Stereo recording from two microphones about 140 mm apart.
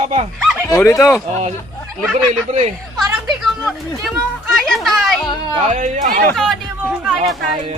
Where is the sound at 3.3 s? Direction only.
Centre (ahead or behind).